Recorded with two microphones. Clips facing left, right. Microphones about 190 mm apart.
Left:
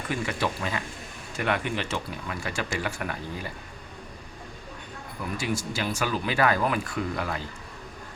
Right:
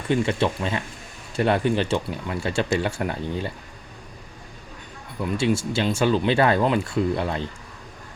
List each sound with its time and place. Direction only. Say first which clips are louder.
0.1 s speech: right 8 dB; 25° right (ahead or behind)
5.2 s speech: right 8 dB; 25° right (ahead or behind)